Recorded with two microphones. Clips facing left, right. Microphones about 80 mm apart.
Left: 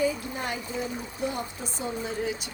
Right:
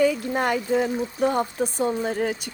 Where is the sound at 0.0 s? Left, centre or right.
Right.